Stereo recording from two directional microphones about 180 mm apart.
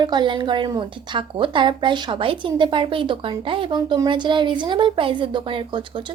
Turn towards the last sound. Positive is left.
turn(degrees=-25)  # may be behind; listen again after turning